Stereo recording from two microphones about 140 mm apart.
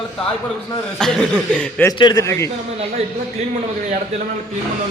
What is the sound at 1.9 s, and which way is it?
Speech, 30° left (ahead or behind).